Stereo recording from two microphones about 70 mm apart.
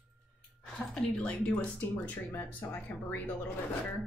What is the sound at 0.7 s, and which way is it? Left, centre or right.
Speech, centre.